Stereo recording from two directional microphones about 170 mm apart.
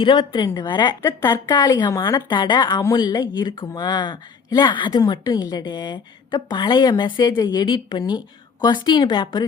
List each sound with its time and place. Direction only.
0.0 s a woman's voice: 30° left (ahead or behind)